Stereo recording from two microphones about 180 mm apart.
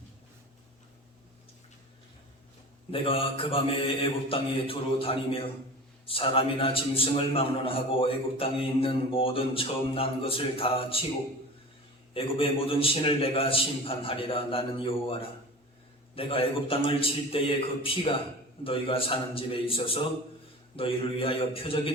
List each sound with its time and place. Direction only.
2.9 s a man's voice: 30° left (ahead or behind)
12.1 s a man's voice: 30° left (ahead or behind)